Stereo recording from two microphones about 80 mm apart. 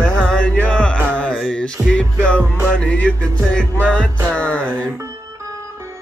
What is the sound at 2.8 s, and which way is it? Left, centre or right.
Music, centre.